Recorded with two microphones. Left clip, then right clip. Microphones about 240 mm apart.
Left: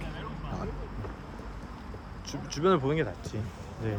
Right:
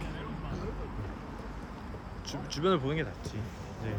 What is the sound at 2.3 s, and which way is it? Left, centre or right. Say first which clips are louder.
Speech: left 3 dB; centre.